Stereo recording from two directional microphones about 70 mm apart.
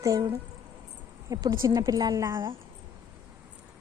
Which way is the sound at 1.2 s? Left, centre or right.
Right.